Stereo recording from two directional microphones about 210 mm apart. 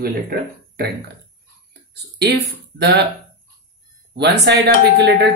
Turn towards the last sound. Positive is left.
turn(degrees=-50)  # may be behind; listen again after turning